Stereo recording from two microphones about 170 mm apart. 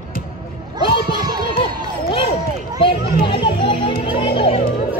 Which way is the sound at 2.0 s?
30° left (ahead or behind).